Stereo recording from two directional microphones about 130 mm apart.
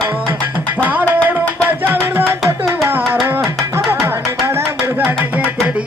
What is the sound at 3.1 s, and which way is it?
Music, 15° right (ahead or behind).